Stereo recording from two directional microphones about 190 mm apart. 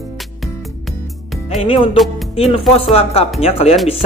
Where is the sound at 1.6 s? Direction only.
30° left (ahead or behind).